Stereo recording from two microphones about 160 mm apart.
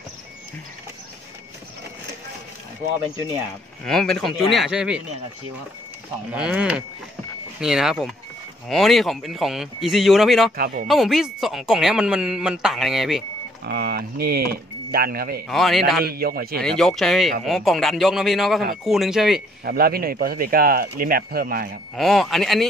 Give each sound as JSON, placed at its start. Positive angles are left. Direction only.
{"t": 3.8, "sound": "speech", "side_deg": 5}
{"t": 6.3, "sound": "speech", "side_deg": -5}
{"t": 10.5, "sound": "speech", "side_deg": -65}
{"t": 10.9, "sound": "speech", "side_deg": 0}
{"t": 13.7, "sound": "speech", "side_deg": -75}
{"t": 15.4, "sound": "speech", "side_deg": 0}
{"t": 16.1, "sound": "speech", "side_deg": -70}
{"t": 16.5, "sound": "speech", "side_deg": 5}
{"t": 19.6, "sound": "speech", "side_deg": -70}
{"t": 21.9, "sound": "speech", "side_deg": 0}